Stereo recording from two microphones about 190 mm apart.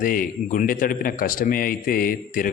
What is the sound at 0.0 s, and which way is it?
Speech, 45° left (ahead or behind).